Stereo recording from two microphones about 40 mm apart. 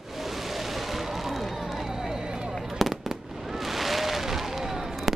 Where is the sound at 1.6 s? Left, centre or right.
Centre.